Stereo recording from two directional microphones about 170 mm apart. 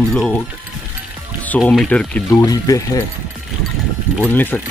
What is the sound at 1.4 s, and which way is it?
Speech, 5° left (ahead or behind).